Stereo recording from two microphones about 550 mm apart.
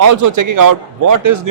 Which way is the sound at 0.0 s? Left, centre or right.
Right.